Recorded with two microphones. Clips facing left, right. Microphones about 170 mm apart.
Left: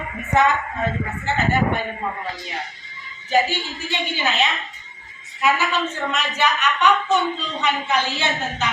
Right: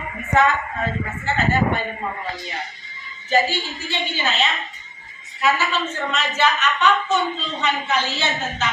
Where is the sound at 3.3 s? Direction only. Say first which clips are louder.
Even; 15° left (ahead or behind).